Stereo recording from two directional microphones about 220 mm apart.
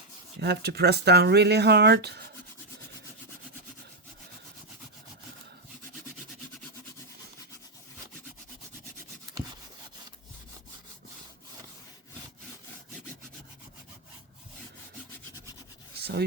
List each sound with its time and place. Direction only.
0.3 s speech: 50° right (ahead or behind)
16.0 s rub: 45° right (ahead or behind)